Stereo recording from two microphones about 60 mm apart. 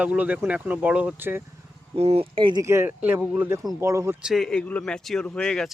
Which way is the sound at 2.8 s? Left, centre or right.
Right.